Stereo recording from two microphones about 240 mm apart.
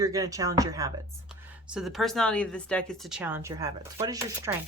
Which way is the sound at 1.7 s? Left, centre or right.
Centre.